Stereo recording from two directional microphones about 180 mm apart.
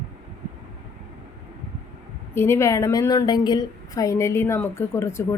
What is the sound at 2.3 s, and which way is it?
A woman's voice, 15° left (ahead or behind).